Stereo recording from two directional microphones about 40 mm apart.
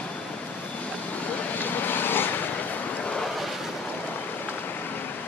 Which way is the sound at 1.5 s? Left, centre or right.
Left.